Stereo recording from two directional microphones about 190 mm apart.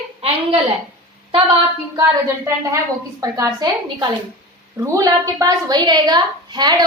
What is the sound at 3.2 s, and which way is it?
A woman's voice, 20° right (ahead or behind).